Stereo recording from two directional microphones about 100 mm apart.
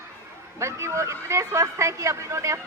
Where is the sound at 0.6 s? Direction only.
30° right (ahead or behind).